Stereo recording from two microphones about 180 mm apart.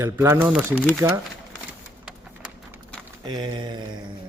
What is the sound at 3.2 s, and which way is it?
Mantra, 25° right (ahead or behind).